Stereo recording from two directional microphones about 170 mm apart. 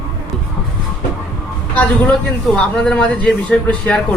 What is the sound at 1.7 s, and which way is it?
A man's voice, 5° left (ahead or behind).